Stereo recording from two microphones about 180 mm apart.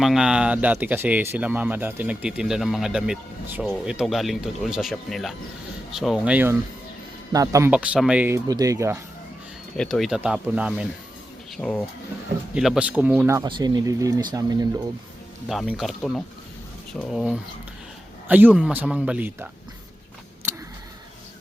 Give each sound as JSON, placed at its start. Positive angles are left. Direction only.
{"t": 0.0, "sound": "speech", "side_deg": 0}
{"t": 7.7, "sound": "speech", "side_deg": -5}
{"t": 8.4, "sound": "speech", "side_deg": -20}
{"t": 9.7, "sound": "speech", "side_deg": 5}
{"t": 11.5, "sound": "speech", "side_deg": 5}
{"t": 12.5, "sound": "speech", "side_deg": -5}
{"t": 15.4, "sound": "speech", "side_deg": 0}